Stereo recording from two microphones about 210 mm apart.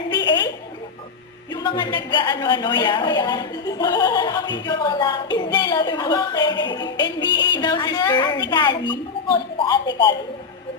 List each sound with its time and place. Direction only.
1.5 s a woman's voice: 20° left (ahead or behind)